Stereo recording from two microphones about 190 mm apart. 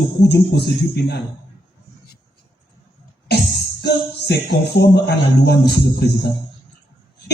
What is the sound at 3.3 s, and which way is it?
Music, 60° left (ahead or behind).